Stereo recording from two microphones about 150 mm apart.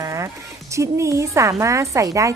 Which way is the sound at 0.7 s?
20° right (ahead or behind).